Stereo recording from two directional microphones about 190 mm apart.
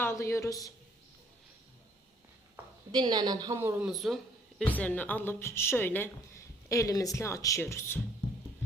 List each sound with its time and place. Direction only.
0.0 s speech: 15° left (ahead or behind)
2.9 s speech: 20° right (ahead or behind); by 8.0 s 15° left (ahead or behind)